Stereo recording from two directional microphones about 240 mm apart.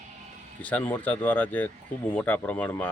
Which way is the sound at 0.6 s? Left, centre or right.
Centre.